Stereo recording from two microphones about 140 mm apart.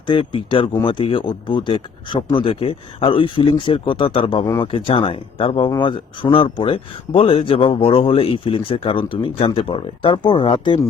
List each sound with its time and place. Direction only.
0.1 s speech: 35° left (ahead or behind)